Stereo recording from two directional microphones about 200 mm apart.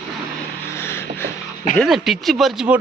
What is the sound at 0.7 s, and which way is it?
Vehicle, 10° left (ahead or behind).